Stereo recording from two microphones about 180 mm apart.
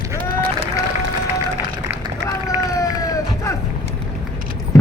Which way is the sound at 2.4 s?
20° left (ahead or behind).